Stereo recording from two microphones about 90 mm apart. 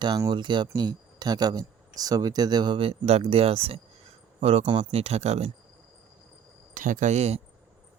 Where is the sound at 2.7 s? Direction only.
90° right.